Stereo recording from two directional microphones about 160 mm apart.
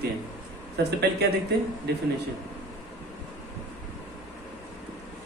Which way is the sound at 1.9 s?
90° right.